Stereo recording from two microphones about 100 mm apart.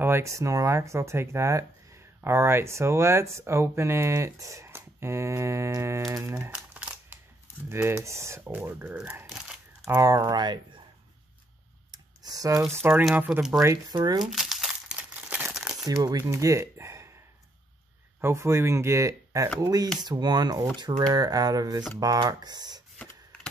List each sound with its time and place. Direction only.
0.0 s speech: 25° right (ahead or behind)
6.5 s crumpling: 15° right (ahead or behind)
7.7 s speech: 25° right (ahead or behind); by 10.8 s 45° right (ahead or behind)
11.9 s computer keyboard: 40° right (ahead or behind)
13.1 s speech: 15° right (ahead or behind)
13.8 s speech: 45° right (ahead or behind)
14.2 s crumpling: 5° right (ahead or behind)
16.0 s speech: 35° right (ahead or behind)
18.2 s speech: 25° right (ahead or behind)
20.0 s speech: 45° right (ahead or behind)